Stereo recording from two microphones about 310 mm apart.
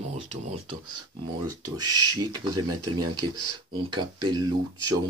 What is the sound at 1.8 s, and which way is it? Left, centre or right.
Speech, centre.